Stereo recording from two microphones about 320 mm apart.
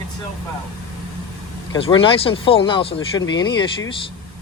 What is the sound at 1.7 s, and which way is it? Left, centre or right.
Speech, centre.